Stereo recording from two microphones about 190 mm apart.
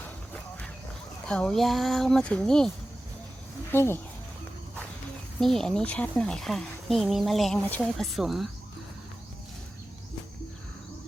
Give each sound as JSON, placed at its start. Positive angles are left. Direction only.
{"t": 1.3, "sound": "speech", "side_deg": 5}
{"t": 5.4, "sound": "speech", "side_deg": 0}